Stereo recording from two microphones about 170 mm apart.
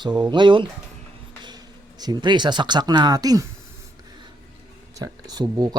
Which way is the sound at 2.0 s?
25° right (ahead or behind).